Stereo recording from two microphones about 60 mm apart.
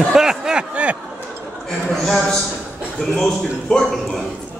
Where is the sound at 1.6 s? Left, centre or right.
Centre.